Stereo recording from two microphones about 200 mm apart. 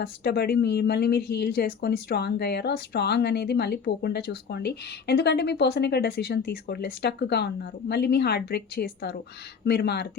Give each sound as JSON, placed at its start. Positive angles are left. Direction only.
{"t": 0.0, "sound": "speech", "side_deg": 55}